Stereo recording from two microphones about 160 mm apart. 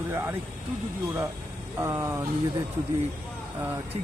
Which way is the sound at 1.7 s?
15° right (ahead or behind).